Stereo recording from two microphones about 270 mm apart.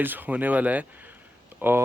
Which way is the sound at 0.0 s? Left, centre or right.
Centre.